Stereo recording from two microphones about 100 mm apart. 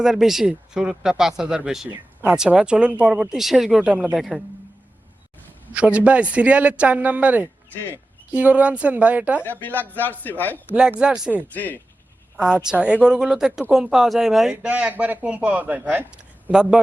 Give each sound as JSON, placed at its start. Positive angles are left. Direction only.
{"t": 0.0, "sound": "speech", "side_deg": -5}
{"t": 5.7, "sound": "speech", "side_deg": -15}
{"t": 9.4, "sound": "speech", "side_deg": 20}
{"t": 11.0, "sound": "speech", "side_deg": -10}
{"t": 11.3, "sound": "speech", "side_deg": 20}
{"t": 12.4, "sound": "speech", "side_deg": -10}